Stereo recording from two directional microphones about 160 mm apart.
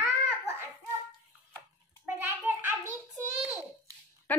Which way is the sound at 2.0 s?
15° right (ahead or behind).